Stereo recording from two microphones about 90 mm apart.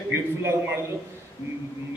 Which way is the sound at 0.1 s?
30° right (ahead or behind).